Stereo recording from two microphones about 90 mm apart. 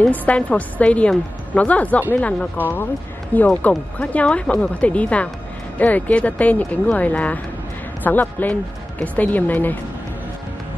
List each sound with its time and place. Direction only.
0.0 s a woman's voice: 15° left (ahead or behind)